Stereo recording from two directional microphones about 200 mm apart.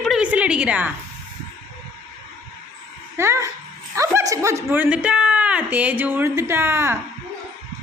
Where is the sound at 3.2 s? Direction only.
15° right (ahead or behind).